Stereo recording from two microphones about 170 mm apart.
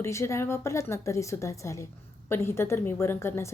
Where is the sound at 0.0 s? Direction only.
15° left (ahead or behind).